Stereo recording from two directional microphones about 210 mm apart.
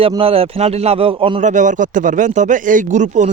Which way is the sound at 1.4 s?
35° right (ahead or behind).